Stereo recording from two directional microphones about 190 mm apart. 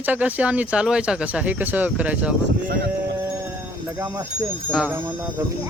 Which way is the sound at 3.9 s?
15° right (ahead or behind).